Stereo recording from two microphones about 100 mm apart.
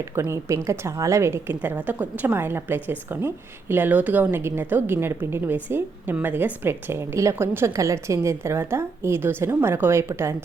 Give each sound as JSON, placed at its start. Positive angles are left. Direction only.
{"t": 0.2, "sound": "a woman's voice", "side_deg": -25}